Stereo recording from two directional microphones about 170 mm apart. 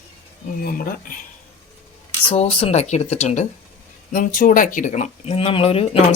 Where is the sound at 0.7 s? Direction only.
60° left (ahead or behind).